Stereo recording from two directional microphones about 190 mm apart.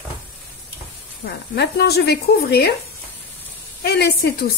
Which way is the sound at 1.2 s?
60° left (ahead or behind).